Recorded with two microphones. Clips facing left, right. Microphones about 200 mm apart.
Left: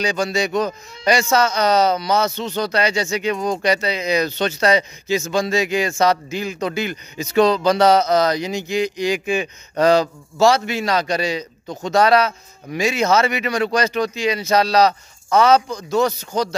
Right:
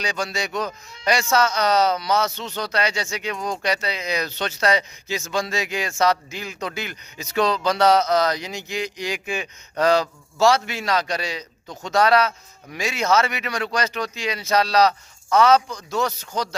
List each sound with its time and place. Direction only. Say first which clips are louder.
0.0 s a man's voice: left 7 dB; centre (ahead or behind)
11.6 s speech: left 4 dB; 20° left (ahead or behind)
12.0 s a man's voice: left 2 dB; centre (ahead or behind)